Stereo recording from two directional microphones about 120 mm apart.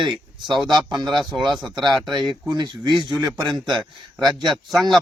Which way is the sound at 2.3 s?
35° right (ahead or behind).